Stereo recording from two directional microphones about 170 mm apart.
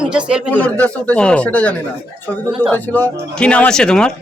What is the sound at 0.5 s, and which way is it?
Speech, 10° left (ahead or behind).